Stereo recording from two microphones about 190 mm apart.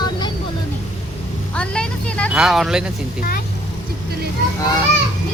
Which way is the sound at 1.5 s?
5° left (ahead or behind).